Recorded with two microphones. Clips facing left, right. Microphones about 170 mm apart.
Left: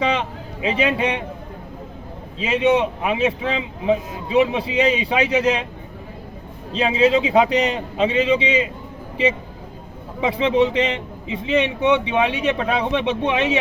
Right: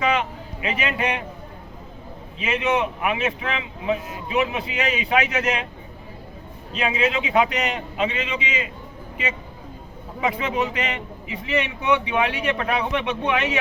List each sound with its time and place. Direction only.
0.0 s a man's voice: 30° left (ahead or behind)
2.4 s a man's voice: 30° left (ahead or behind)
6.7 s a man's voice: 30° left (ahead or behind)
10.2 s a man's voice: 30° left (ahead or behind)